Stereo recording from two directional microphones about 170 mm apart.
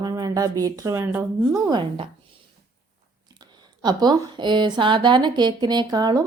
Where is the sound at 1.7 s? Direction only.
30° right (ahead or behind).